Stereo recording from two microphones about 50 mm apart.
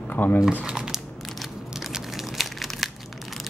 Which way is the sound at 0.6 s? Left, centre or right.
Centre.